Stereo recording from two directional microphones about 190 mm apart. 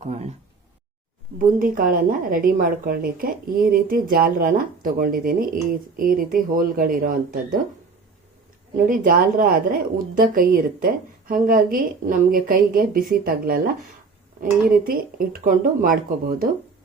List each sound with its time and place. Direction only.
0.0 s speech: 35° right (ahead or behind)
1.4 s a woman's voice: 45° right (ahead or behind)
8.9 s a woman's voice: 45° right (ahead or behind)
14.7 s a woman's voice: 50° right (ahead or behind)